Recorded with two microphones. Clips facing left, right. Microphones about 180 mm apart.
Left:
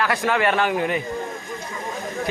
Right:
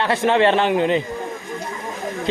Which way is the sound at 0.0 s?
25° right (ahead or behind).